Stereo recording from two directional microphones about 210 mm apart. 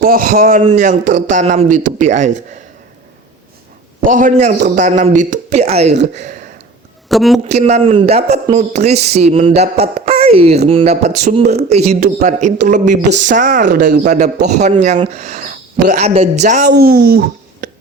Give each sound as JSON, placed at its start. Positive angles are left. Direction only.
{"t": 0.0, "sound": "speech", "side_deg": -40}
{"t": 4.0, "sound": "speech", "side_deg": -40}
{"t": 7.1, "sound": "speech", "side_deg": 0}
{"t": 7.4, "sound": "a man's voice", "side_deg": -30}